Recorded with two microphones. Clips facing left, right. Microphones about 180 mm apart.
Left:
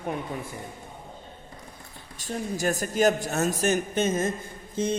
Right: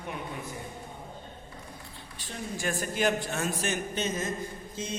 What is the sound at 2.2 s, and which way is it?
A man's voice, 40° left (ahead or behind).